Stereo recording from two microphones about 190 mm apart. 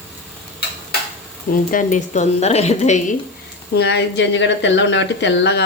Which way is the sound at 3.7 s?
65° left (ahead or behind).